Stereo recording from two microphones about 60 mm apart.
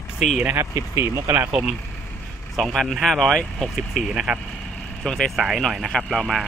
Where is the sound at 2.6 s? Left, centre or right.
Centre.